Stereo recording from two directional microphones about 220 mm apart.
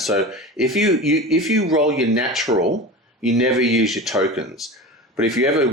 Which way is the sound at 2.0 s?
Centre (ahead or behind).